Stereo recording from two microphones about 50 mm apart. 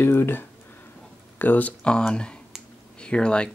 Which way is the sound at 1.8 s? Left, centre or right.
Centre.